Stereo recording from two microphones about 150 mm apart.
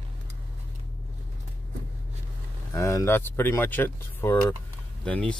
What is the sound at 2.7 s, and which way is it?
Speech, 20° left (ahead or behind).